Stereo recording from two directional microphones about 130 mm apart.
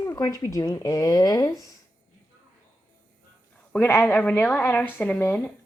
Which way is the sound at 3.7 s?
15° left (ahead or behind).